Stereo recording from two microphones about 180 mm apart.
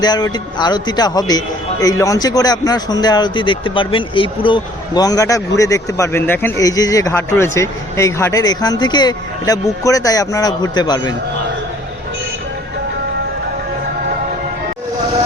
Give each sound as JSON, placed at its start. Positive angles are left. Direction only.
{"t": 0.0, "sound": "speech", "side_deg": 25}